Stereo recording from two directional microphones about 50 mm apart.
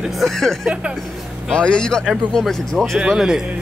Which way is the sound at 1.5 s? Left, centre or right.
Centre.